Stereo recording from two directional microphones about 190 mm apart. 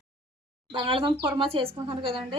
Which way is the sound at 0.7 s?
25° right (ahead or behind).